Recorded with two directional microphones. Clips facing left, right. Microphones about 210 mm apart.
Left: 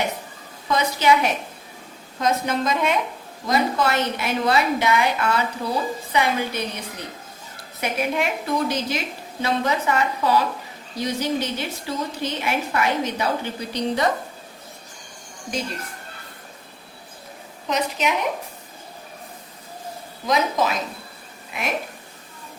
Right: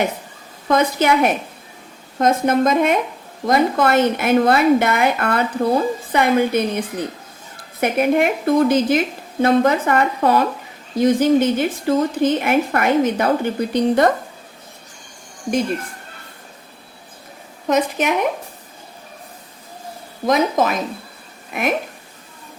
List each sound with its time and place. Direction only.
0.7 s a woman's voice: 50° right (ahead or behind)
17.7 s a woman's voice: 50° right (ahead or behind)
20.2 s a woman's voice: 50° right (ahead or behind)